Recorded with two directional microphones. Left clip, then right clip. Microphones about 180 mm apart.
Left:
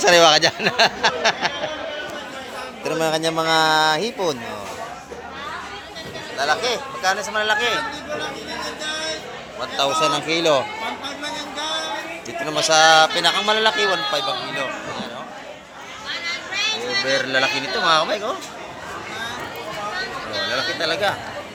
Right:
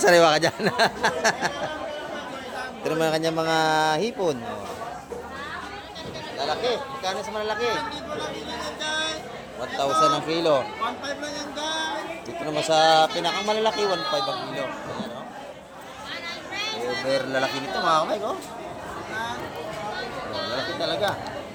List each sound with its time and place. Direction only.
0.0 s speech: 25° right (ahead or behind)
2.8 s a man's voice: 10° right (ahead or behind)
6.3 s a man's voice: centre (ahead or behind)
9.6 s a man's voice: 10° right (ahead or behind)
12.5 s speech: 20° right (ahead or behind)
13.1 s speech: 5° right (ahead or behind)
14.1 s speech: 20° left (ahead or behind)
16.6 s a sound: 65° right (ahead or behind)
17.1 s a man's voice: 5° right (ahead or behind)
20.3 s a sound: 55° right (ahead or behind)
20.7 s a man's voice: 5° right (ahead or behind)